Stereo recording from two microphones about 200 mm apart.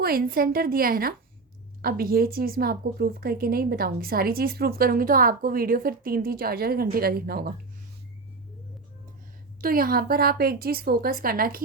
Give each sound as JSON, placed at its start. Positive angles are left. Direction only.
{"t": 0.0, "sound": "a woman's voice", "side_deg": -45}
{"t": 9.6, "sound": "a woman's voice", "side_deg": -45}